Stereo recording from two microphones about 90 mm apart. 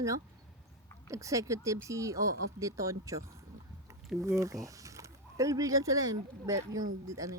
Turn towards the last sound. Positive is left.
turn(degrees=-40)  # may be behind; listen again after turning